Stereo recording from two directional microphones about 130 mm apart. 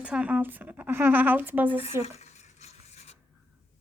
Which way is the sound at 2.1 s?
60° left (ahead or behind).